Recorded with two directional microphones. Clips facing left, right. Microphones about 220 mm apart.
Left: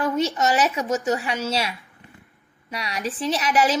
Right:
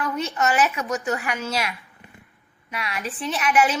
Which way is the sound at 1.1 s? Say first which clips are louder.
Left 2 dB; 30° left (ahead or behind).